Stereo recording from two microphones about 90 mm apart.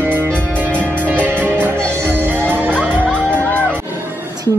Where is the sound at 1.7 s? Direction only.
25° right (ahead or behind).